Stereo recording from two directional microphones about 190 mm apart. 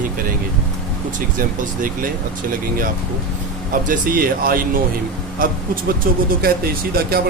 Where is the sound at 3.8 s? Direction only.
50° right (ahead or behind).